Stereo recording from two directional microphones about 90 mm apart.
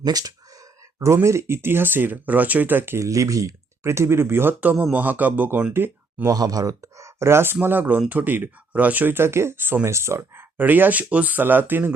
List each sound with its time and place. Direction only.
0.0 s speech: 45° right (ahead or behind)
0.9 s speech: 30° right (ahead or behind)
6.3 s speech: 45° right (ahead or behind); by 11.9 s 20° right (ahead or behind)